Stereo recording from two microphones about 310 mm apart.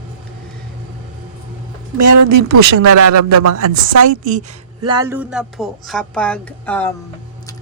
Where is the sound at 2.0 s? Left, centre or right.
Right.